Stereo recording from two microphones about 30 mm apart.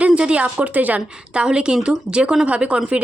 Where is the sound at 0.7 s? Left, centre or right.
Right.